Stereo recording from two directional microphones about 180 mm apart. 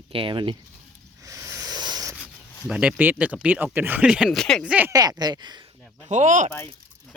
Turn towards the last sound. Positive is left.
turn(degrees=-45)  # may be behind; listen again after turning